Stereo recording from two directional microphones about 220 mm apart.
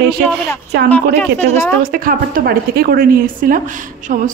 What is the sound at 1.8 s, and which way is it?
A woman's voice, 40° right (ahead or behind).